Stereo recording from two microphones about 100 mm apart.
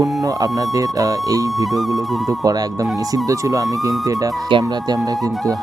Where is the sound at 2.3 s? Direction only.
35° right (ahead or behind).